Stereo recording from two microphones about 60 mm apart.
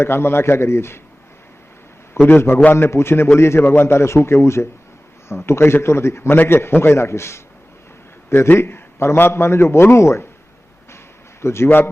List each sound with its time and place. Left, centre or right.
0.0 s a man's voice: left
2.2 s a man's voice: left
11.4 s a man's voice: left